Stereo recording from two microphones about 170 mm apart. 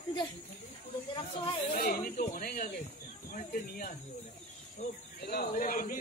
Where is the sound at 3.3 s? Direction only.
55° left (ahead or behind).